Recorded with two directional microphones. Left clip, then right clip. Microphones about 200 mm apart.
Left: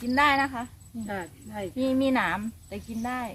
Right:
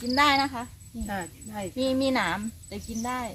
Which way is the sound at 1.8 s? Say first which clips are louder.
Even; 20° right (ahead or behind).